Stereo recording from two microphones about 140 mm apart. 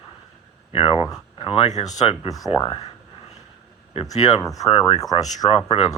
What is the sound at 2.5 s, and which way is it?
Speech, 40° left (ahead or behind).